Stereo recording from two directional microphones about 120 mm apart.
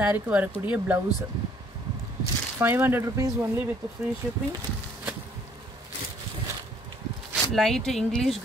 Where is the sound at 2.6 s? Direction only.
15° right (ahead or behind).